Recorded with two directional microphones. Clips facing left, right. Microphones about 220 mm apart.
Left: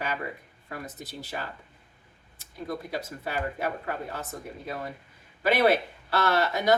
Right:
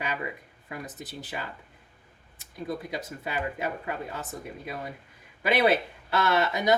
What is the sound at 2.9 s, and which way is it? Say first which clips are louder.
Speech: left 1 dB; 15° right (ahead or behind).